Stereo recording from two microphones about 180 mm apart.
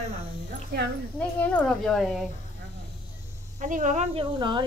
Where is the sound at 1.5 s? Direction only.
5° left (ahead or behind).